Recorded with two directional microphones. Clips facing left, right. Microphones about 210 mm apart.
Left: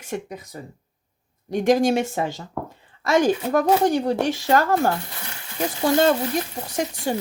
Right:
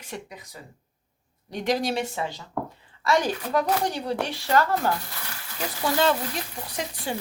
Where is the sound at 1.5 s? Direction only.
45° left (ahead or behind).